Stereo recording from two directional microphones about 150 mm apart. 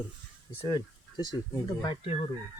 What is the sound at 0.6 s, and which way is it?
Speech, 25° left (ahead or behind).